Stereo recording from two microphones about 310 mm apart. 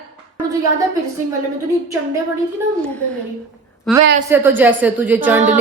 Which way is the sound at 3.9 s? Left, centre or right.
Centre.